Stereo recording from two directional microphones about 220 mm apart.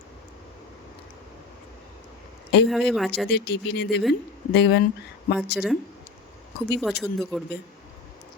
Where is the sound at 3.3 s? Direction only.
50° left (ahead or behind).